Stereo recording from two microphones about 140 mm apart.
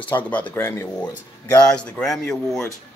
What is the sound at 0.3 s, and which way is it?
Speech, 10° left (ahead or behind).